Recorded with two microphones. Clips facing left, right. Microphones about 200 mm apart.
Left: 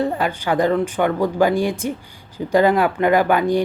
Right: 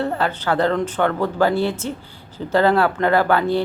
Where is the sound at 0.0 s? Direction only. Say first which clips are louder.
Left 1 dB; 15° left (ahead or behind).